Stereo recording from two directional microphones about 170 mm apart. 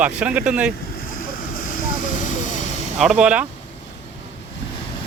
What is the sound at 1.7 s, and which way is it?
Vehicle, 45° left (ahead or behind).